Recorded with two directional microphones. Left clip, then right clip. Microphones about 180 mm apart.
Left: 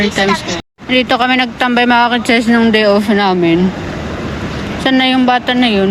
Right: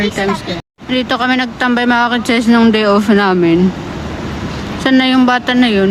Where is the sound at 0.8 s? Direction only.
Centre (ahead or behind).